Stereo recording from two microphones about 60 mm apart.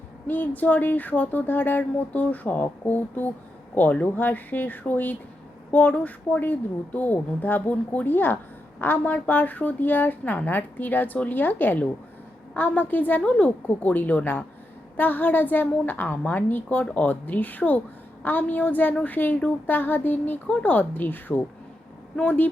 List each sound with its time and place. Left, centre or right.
0.3 s a woman's voice: left
22.1 s speech: centre